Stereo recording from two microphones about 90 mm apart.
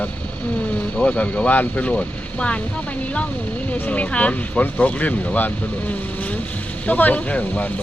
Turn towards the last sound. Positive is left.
turn(degrees=15)  # may be behind; listen again after turning